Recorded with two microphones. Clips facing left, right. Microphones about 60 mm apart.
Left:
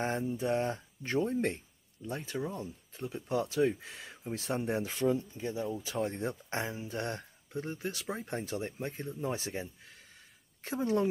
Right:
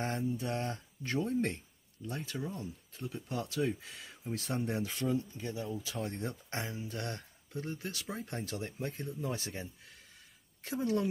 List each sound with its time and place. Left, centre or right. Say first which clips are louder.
0.0 s speech: left 3 dB; centre